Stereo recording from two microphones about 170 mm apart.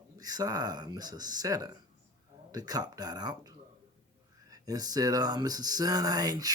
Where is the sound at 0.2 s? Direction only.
20° right (ahead or behind).